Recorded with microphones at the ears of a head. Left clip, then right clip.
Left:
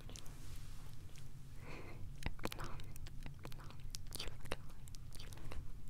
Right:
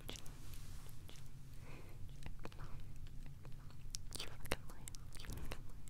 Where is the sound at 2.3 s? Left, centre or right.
Left.